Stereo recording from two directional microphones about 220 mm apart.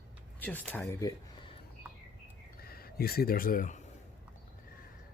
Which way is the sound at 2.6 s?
45° left (ahead or behind).